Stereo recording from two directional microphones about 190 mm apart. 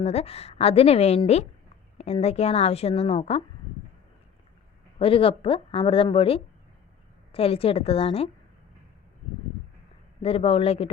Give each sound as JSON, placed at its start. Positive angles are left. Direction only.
{"t": 0.0, "sound": "a woman's voice", "side_deg": 35}
{"t": 4.9, "sound": "a woman's voice", "side_deg": 30}
{"t": 10.2, "sound": "a woman's voice", "side_deg": 30}